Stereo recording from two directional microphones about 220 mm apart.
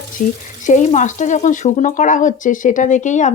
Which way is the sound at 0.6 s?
35° left (ahead or behind).